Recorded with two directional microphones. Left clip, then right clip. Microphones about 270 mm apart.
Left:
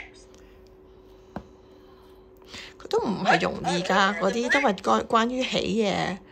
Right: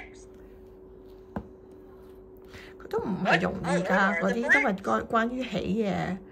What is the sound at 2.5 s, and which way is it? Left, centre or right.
A woman's voice, centre.